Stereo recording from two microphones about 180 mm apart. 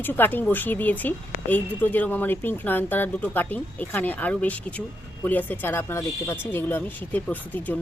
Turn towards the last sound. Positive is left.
turn(degrees=10)  # may be behind; listen again after turning